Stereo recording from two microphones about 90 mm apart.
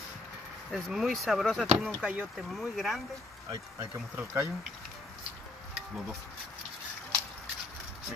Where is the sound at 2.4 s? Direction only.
Centre (ahead or behind).